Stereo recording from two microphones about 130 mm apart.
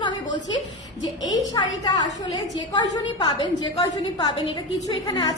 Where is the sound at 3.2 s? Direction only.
40° left (ahead or behind).